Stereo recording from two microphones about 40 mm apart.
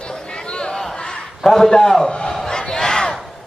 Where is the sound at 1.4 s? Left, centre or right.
Centre.